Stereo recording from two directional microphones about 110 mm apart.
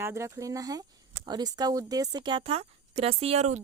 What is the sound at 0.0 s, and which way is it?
Speech, 25° right (ahead or behind).